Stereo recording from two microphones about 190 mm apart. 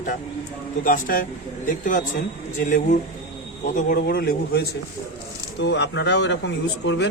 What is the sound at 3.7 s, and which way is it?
Speech, 50° left (ahead or behind).